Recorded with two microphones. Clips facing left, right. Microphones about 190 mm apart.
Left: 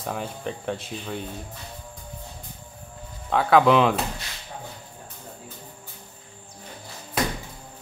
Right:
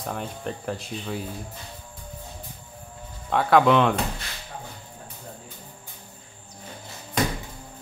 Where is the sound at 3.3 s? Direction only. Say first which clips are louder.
Left 1 dB; centre (ahead or behind).